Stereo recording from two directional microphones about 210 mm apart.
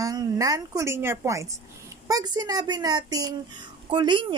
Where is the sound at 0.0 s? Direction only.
15° right (ahead or behind).